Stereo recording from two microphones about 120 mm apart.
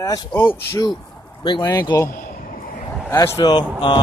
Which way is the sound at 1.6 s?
35° left (ahead or behind).